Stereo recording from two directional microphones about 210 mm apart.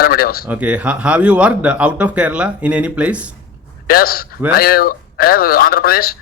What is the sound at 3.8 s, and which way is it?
Speech, 45° left (ahead or behind).